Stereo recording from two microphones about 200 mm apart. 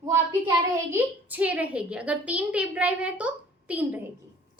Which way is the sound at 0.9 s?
10° right (ahead or behind).